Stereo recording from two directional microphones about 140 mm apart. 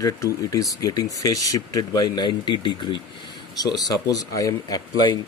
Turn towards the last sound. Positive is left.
turn(degrees=25)  # may be behind; listen again after turning